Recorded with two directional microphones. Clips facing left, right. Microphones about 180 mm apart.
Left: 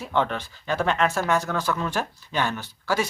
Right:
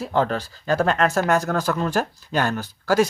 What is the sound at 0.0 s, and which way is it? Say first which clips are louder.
Speech: right 3 dB; 35° right (ahead or behind).